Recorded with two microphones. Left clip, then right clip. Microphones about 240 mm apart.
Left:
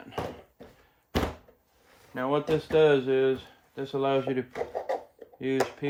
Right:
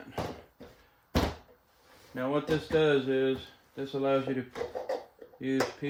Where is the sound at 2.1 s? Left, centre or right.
Left.